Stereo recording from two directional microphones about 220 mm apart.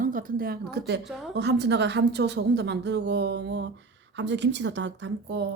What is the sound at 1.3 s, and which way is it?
A woman's voice, 50° right (ahead or behind).